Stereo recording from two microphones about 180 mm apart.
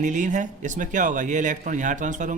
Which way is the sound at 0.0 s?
45° right (ahead or behind).